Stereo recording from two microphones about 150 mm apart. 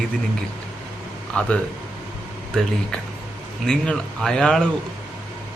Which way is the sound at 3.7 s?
5° left (ahead or behind).